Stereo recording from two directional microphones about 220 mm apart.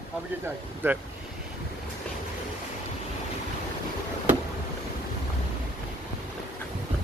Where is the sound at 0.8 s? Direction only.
10° right (ahead or behind).